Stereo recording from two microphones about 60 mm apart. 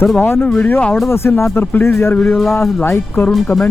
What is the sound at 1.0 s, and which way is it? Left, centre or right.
Speech, left.